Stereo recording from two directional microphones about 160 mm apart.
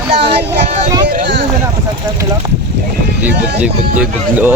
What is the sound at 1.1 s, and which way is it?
Speech, 75° right (ahead or behind).